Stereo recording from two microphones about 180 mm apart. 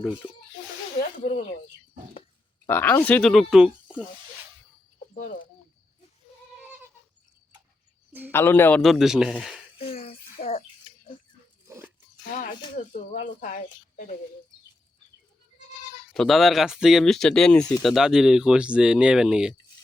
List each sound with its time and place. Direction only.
2.6 s speech: 10° left (ahead or behind)
5.1 s bird: 45° left (ahead or behind)
8.3 s speech: 15° left (ahead or behind)
8.8 s speech: centre (ahead or behind)
9.7 s a sound: 30° left (ahead or behind)
10.4 s a sound: 55° left (ahead or behind)
12.4 s speech: 50° left (ahead or behind)
16.1 s speech: centre (ahead or behind)